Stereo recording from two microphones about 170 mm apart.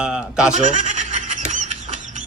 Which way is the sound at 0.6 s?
45° right (ahead or behind).